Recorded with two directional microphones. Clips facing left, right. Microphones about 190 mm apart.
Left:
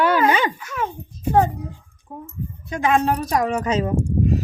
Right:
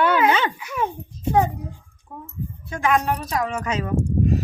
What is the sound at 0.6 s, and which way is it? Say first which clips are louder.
Speech: right 1 dB; 15° right (ahead or behind).